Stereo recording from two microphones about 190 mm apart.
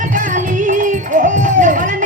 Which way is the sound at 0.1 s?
45° right (ahead or behind).